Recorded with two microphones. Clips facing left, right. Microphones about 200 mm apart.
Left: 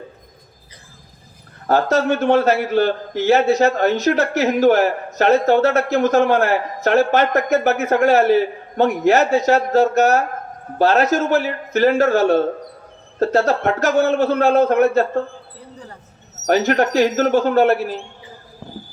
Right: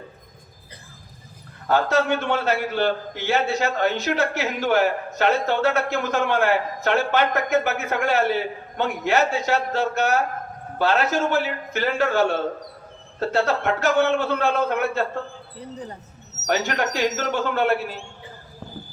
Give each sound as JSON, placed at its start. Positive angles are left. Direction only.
{"t": 1.6, "sound": "a man's voice", "side_deg": 40}
{"t": 15.5, "sound": "speech", "side_deg": -20}
{"t": 16.5, "sound": "a man's voice", "side_deg": 40}